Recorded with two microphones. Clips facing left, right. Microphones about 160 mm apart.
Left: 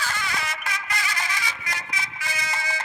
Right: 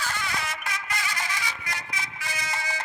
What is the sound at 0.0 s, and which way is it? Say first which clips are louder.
Music: left 1 dB; 90° left.